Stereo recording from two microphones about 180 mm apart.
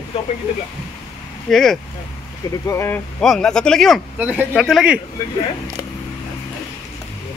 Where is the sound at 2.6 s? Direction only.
15° left (ahead or behind).